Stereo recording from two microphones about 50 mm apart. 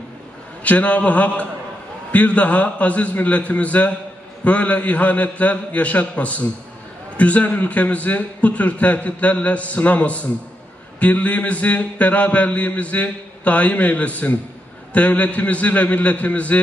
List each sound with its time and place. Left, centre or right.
0.7 s mantra: left